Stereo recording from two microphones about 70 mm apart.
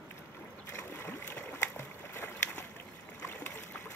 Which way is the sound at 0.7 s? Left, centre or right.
Left.